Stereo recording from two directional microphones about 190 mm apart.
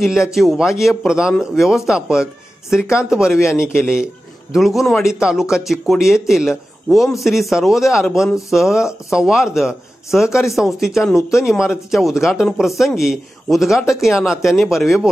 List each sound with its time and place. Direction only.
0.0 s speech: centre (ahead or behind)